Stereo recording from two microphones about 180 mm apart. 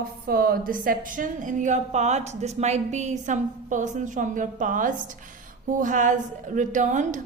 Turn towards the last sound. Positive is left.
turn(degrees=-45)  # may be behind; listen again after turning